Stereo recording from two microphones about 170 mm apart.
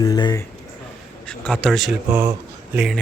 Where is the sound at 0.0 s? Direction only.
25° left (ahead or behind).